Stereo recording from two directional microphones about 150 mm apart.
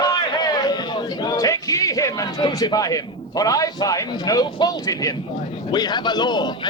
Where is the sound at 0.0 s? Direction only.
25° left (ahead or behind).